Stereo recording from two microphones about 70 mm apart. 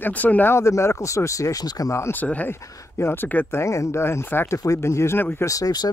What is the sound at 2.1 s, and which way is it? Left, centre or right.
Speech, left.